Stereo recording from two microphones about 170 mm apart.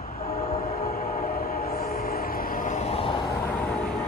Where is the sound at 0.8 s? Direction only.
60° left (ahead or behind); by 3.2 s 35° left (ahead or behind).